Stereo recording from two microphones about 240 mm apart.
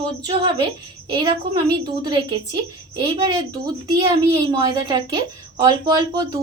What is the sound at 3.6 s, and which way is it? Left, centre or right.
A woman's voice, centre.